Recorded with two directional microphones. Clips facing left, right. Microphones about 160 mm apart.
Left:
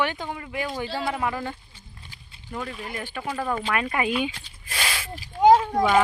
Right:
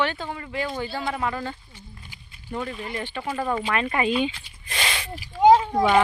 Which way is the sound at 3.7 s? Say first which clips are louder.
Right 3 dB; 5° left (ahead or behind).